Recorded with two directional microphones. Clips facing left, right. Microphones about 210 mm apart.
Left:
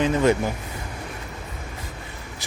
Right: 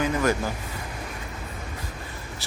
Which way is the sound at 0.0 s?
25° left (ahead or behind).